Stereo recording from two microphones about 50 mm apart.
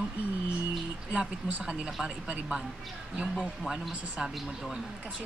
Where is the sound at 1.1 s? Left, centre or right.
Right.